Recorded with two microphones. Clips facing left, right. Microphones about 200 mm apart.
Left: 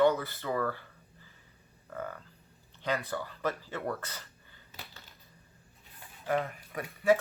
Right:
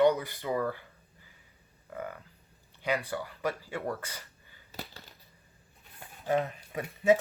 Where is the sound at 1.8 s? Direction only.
10° right (ahead or behind).